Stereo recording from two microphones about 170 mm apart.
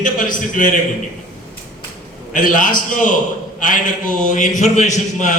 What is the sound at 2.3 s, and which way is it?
A man's voice, 50° left (ahead or behind).